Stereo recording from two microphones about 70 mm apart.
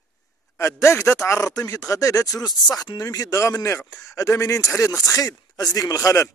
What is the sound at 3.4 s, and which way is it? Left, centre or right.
A man's voice, left.